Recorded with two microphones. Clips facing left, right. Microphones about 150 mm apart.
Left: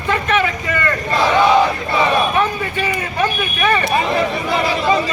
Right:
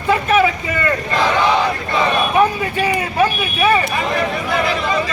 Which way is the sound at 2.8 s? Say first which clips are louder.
Right 4 dB; 10° right (ahead or behind).